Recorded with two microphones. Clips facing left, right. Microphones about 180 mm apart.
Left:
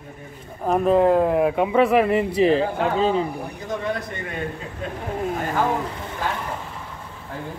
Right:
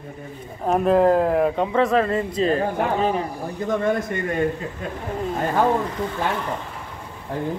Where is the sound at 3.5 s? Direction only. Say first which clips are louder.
Right 7 dB; 55° right (ahead or behind).